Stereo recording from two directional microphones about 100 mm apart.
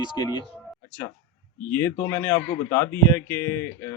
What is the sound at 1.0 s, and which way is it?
Speech, 25° left (ahead or behind).